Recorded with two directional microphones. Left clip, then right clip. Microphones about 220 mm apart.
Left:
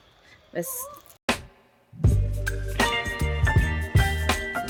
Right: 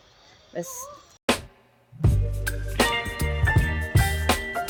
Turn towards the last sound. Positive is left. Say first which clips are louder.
# right 1 dB
turn(degrees=0)  # may be behind; listen again after turning